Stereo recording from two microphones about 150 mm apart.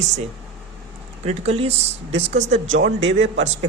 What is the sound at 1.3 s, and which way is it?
A man's voice, 45° right (ahead or behind).